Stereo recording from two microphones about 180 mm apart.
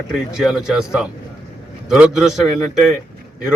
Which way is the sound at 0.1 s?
Centre (ahead or behind).